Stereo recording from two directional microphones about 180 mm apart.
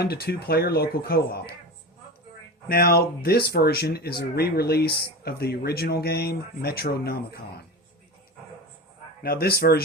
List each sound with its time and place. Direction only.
0.0 s speech: 60° left (ahead or behind)
2.6 s speech: 55° left (ahead or behind)
9.2 s speech: 60° left (ahead or behind)